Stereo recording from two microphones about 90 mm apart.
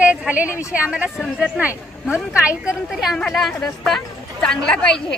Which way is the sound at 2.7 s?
5° right (ahead or behind).